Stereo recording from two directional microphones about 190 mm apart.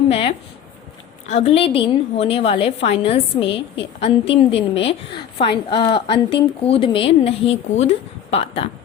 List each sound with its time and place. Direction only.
0.1 s a woman's voice: 30° left (ahead or behind)